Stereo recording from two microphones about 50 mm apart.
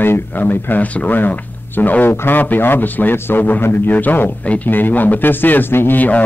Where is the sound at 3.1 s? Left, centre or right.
Left.